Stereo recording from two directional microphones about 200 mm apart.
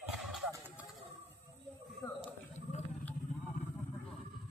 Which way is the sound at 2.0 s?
20° left (ahead or behind).